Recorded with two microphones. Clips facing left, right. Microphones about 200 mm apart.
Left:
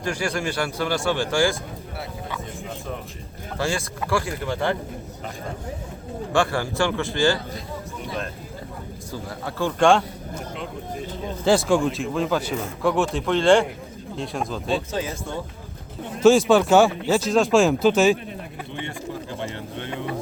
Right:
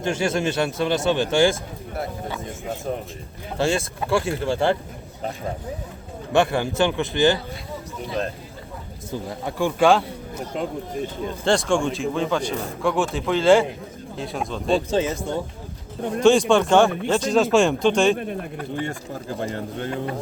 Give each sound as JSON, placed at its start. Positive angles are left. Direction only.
{"t": 0.0, "sound": "speech", "side_deg": -25}
{"t": 3.6, "sound": "speech", "side_deg": -25}
{"t": 6.3, "sound": "speech", "side_deg": -20}
{"t": 9.4, "sound": "speech", "side_deg": -15}
{"t": 11.4, "sound": "speech", "side_deg": 5}
{"t": 16.2, "sound": "speech", "side_deg": 5}
{"t": 18.7, "sound": "speech", "side_deg": -40}